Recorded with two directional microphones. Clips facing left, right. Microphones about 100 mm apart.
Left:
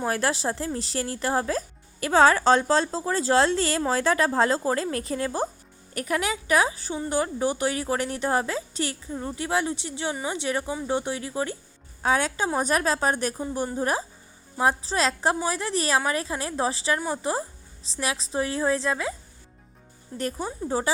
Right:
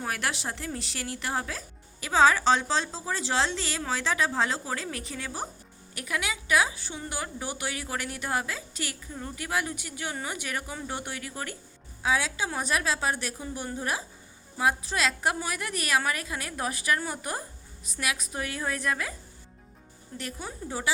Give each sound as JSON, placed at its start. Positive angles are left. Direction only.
{"t": 0.1, "sound": "a woman's voice", "side_deg": 35}
{"t": 12.0, "sound": "a woman's voice", "side_deg": 50}
{"t": 20.1, "sound": "a woman's voice", "side_deg": 35}